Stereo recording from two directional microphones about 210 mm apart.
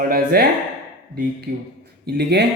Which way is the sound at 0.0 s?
45° right (ahead or behind).